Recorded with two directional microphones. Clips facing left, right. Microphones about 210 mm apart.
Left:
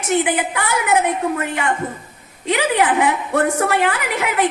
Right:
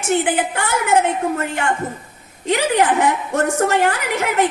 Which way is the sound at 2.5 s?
45° right (ahead or behind).